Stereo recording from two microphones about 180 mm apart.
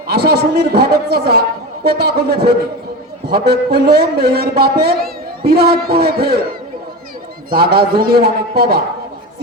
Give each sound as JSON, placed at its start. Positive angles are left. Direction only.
{"t": 0.1, "sound": "a man's voice", "side_deg": -60}
{"t": 7.5, "sound": "a man's voice", "side_deg": -60}